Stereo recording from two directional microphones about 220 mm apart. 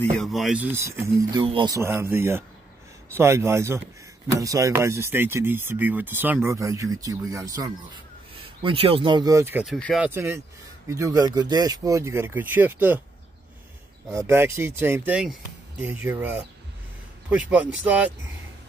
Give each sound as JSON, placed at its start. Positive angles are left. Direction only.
{"t": 0.0, "sound": "speech", "side_deg": 0}
{"t": 9.8, "sound": "speech", "side_deg": 5}
{"t": 10.0, "sound": "speech", "side_deg": -10}
{"t": 14.1, "sound": "speech", "side_deg": -10}
{"t": 17.5, "sound": "speech", "side_deg": -5}